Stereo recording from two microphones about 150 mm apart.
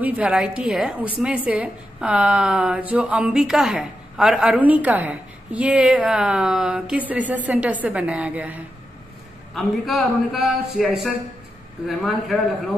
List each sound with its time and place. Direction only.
0.0 s a woman's voice: 10° right (ahead or behind)
9.5 s a man's voice: centre (ahead or behind)